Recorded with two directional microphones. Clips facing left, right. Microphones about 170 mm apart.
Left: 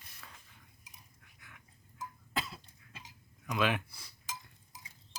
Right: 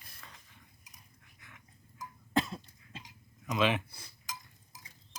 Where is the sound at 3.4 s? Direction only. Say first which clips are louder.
Right 2 dB; centre (ahead or behind).